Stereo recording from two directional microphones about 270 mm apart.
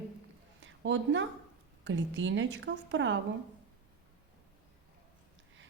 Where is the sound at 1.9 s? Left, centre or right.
Right.